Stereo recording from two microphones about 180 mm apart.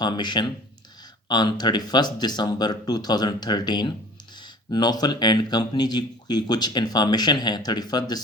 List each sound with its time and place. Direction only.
0.0 s speech: 25° left (ahead or behind)